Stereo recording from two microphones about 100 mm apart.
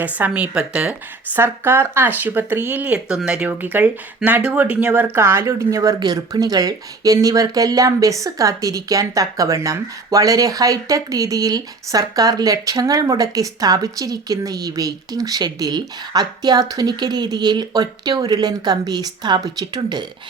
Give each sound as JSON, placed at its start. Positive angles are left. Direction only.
{"t": 0.0, "sound": "speech", "side_deg": -15}
{"t": 1.4, "sound": "speech", "side_deg": -25}
{"t": 6.0, "sound": "speech", "side_deg": -45}